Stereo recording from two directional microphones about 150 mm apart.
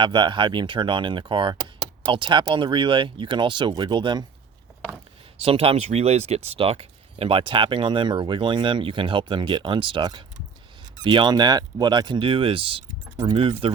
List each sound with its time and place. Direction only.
0.0 s speech: 30° right (ahead or behind)
5.4 s speech: 40° right (ahead or behind)
13.1 s keys jangling: 20° right (ahead or behind)
13.3 s speech: 40° right (ahead or behind)